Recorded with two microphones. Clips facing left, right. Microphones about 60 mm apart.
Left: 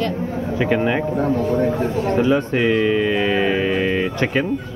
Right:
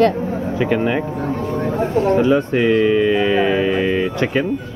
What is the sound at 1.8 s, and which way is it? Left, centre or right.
Speech, right.